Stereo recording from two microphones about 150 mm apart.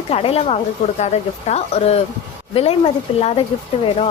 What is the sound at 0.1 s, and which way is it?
Speech, 40° left (ahead or behind).